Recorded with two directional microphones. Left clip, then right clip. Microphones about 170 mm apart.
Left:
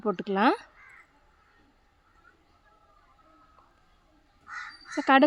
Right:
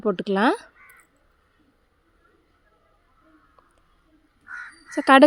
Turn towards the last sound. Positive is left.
turn(degrees=-35)  # may be behind; listen again after turning